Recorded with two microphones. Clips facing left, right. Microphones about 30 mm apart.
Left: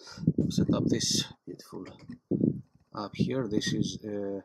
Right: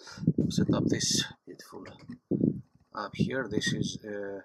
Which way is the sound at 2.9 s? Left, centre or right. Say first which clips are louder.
Even; centre.